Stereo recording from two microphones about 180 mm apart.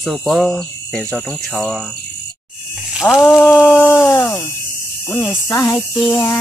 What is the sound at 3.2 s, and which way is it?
Speech, centre (ahead or behind).